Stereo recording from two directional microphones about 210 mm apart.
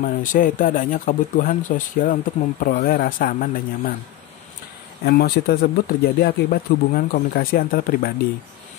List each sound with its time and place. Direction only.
0.0 s speech: 40° left (ahead or behind)
5.0 s speech: 50° left (ahead or behind)